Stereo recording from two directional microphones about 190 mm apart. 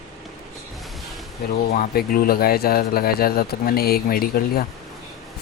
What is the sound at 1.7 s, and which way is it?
A man's voice, 45° left (ahead or behind).